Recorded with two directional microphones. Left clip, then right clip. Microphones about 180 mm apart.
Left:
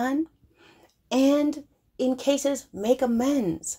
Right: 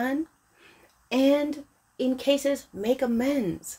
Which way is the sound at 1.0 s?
15° left (ahead or behind).